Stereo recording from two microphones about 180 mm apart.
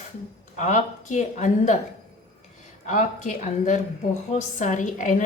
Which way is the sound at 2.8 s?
45° left (ahead or behind).